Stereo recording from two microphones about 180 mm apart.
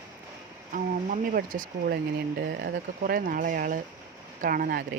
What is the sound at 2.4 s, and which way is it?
Speech, 65° right (ahead or behind).